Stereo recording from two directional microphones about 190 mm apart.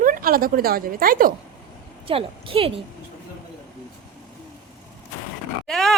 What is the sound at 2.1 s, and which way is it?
Speech, 30° right (ahead or behind).